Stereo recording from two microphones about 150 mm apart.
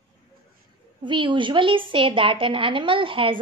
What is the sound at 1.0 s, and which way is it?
A woman's voice, 30° right (ahead or behind).